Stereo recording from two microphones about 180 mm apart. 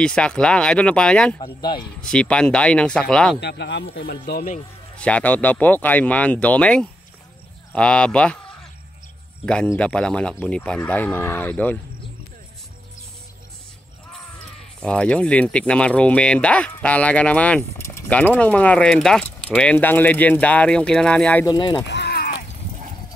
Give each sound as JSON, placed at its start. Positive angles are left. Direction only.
{"t": 0.0, "sound": "speech", "side_deg": 5}
{"t": 1.4, "sound": "speech", "side_deg": 25}
{"t": 2.0, "sound": "speech", "side_deg": 5}
{"t": 3.3, "sound": "speech", "side_deg": 70}
{"t": 3.9, "sound": "speech", "side_deg": 60}
{"t": 4.9, "sound": "speech", "side_deg": 5}
{"t": 9.8, "sound": "speech", "side_deg": 5}
{"t": 14.8, "sound": "speech", "side_deg": 5}
{"t": 21.5, "sound": "speech", "side_deg": 25}
{"t": 21.8, "sound": "a sound", "side_deg": 70}